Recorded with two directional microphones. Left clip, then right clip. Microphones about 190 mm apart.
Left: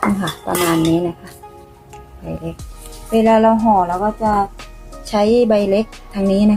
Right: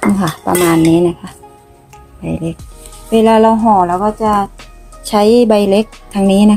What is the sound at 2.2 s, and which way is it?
Speech, 40° right (ahead or behind).